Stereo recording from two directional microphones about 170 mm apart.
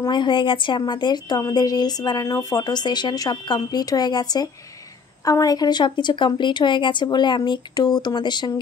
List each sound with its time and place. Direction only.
0.0 s a woman's voice: 25° left (ahead or behind)